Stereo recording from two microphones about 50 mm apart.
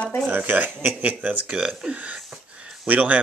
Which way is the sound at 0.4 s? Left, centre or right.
Right.